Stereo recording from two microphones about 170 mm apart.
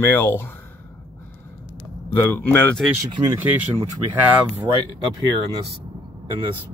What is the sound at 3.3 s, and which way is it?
Speech, 10° right (ahead or behind).